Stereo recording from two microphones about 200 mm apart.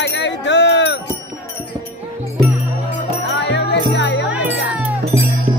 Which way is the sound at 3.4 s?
60° left (ahead or behind).